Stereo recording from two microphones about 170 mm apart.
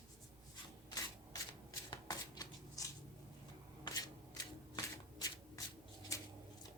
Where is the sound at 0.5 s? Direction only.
25° left (ahead or behind).